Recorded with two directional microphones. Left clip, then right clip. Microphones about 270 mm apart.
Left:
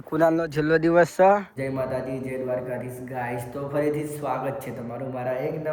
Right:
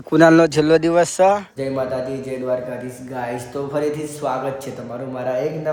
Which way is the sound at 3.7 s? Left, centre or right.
Centre.